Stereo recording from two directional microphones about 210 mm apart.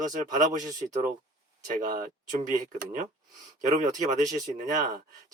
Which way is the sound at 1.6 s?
40° right (ahead or behind).